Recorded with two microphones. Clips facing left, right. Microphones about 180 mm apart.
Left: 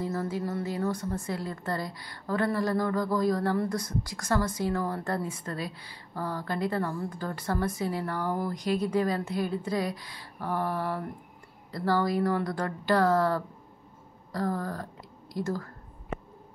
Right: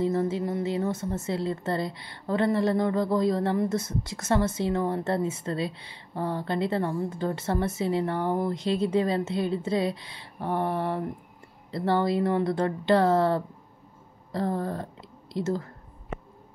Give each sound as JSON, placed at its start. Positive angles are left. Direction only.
{"t": 0.0, "sound": "a woman's voice", "side_deg": -20}